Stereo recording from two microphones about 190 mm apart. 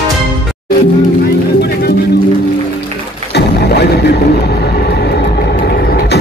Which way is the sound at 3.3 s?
60° left (ahead or behind).